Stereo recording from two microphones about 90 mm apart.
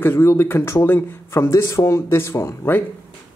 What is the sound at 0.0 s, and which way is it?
Speech, 25° left (ahead or behind).